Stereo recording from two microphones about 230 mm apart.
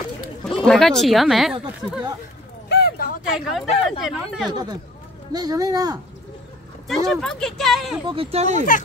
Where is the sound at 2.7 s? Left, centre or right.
Left.